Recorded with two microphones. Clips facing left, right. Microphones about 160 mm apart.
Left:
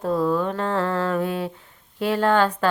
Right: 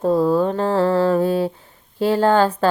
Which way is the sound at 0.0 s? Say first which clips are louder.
Right 5 dB; 30° right (ahead or behind).